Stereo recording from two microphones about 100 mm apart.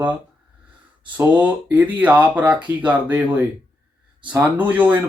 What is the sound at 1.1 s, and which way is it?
Speech, 15° right (ahead or behind).